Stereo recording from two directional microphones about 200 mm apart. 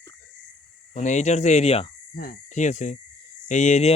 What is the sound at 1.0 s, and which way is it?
Speech, 35° left (ahead or behind).